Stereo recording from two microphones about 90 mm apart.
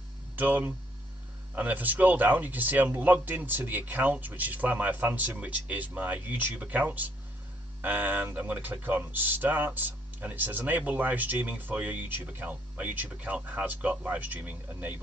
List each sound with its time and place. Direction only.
0.4 s speech: 20° right (ahead or behind)